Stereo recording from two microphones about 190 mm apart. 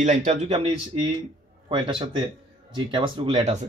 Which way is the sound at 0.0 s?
40° right (ahead or behind).